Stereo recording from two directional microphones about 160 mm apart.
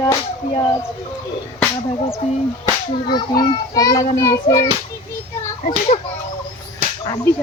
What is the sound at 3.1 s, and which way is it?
A child's voice, 25° left (ahead or behind).